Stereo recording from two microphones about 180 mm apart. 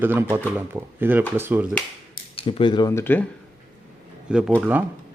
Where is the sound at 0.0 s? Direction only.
10° right (ahead or behind).